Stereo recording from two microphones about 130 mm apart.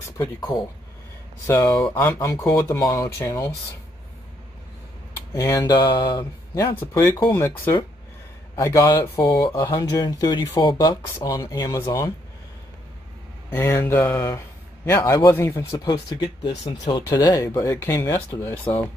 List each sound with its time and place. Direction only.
0.0 s a sound: 25° left (ahead or behind)
1.5 s speech: 25° left (ahead or behind)
1.9 s speech: 15° left (ahead or behind)
5.3 s speech: 20° left (ahead or behind); by 6.8 s 40° left (ahead or behind)
6.8 s speech: 15° left (ahead or behind)
11.0 s speech: 20° left (ahead or behind)
13.5 s speech: 20° left (ahead or behind)